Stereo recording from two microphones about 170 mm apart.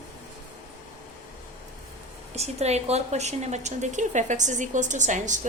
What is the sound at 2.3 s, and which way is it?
A woman's voice, 40° right (ahead or behind).